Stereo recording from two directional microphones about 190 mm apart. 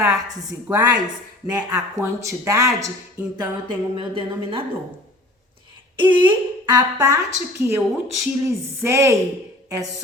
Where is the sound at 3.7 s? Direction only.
25° right (ahead or behind).